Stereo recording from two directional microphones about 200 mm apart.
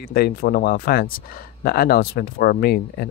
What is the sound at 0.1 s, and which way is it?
Speech, 50° left (ahead or behind).